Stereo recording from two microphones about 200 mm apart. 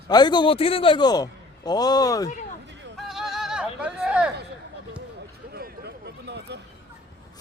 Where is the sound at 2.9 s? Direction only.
Centre (ahead or behind).